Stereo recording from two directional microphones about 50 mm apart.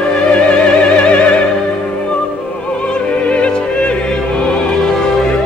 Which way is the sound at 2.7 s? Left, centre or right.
Left.